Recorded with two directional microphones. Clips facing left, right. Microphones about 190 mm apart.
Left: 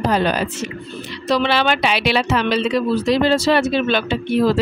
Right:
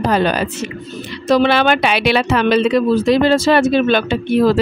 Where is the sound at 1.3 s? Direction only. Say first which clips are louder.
Right 5 dB; 50° right (ahead or behind).